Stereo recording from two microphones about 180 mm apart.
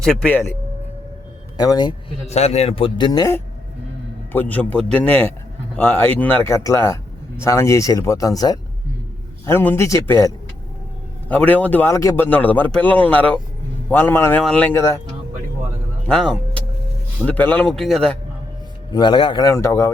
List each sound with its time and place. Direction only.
0.0 s a man's voice: 5° left (ahead or behind)
1.5 s a man's voice: 20° left (ahead or behind)
2.2 s a man's voice: 35° left (ahead or behind); by 14.9 s 15° left (ahead or behind)
16.0 s speech: 5° left (ahead or behind)
18.9 s a man's voice: 25° left (ahead or behind)